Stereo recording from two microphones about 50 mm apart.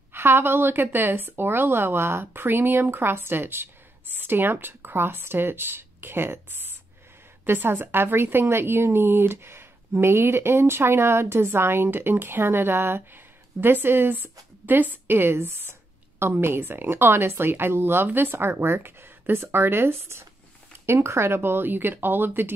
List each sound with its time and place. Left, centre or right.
0.1 s a woman's voice: right